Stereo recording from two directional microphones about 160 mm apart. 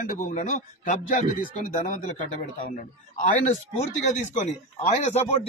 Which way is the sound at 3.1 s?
50° left (ahead or behind).